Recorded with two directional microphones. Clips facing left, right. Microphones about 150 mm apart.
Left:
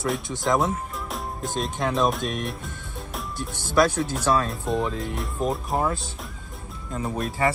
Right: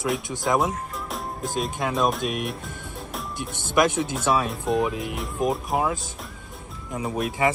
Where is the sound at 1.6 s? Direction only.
Centre (ahead or behind).